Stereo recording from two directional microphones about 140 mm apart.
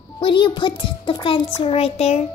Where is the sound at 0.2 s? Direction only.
35° left (ahead or behind).